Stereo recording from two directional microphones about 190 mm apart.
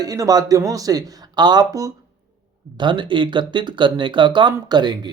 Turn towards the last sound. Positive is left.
turn(degrees=-20)  # may be behind; listen again after turning